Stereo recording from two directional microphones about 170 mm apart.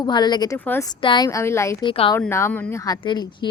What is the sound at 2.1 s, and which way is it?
Speech, 15° left (ahead or behind).